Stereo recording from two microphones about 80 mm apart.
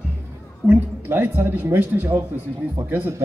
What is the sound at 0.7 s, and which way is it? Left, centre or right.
Speech, right.